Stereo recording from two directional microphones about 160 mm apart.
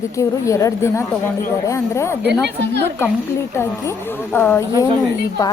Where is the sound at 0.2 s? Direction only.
20° left (ahead or behind).